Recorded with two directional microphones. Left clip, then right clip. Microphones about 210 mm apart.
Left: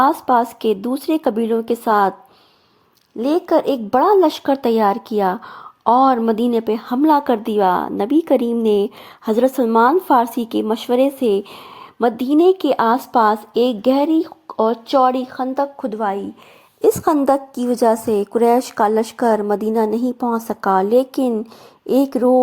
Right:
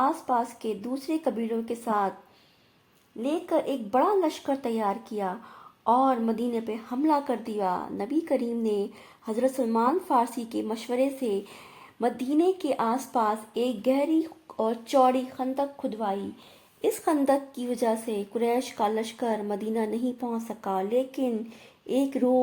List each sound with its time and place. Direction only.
0.0 s a woman's voice: 35° left (ahead or behind)
3.2 s a woman's voice: 35° left (ahead or behind)